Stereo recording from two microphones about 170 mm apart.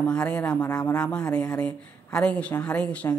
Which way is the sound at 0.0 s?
5° left (ahead or behind).